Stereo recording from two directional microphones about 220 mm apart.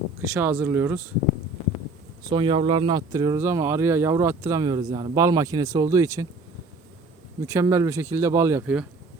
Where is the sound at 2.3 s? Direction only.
20° right (ahead or behind).